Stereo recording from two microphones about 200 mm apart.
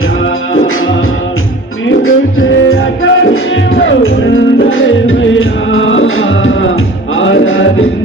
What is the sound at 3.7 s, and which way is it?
Music, 70° left (ahead or behind).